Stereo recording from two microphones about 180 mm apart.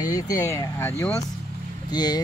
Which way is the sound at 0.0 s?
20° left (ahead or behind).